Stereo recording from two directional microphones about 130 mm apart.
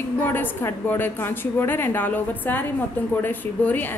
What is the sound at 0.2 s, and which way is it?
A woman's voice, 15° left (ahead or behind).